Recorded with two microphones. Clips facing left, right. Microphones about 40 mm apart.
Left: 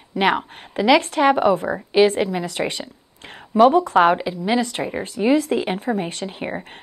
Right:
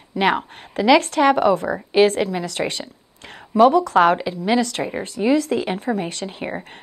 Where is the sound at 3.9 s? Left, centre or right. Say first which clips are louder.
Even; centre.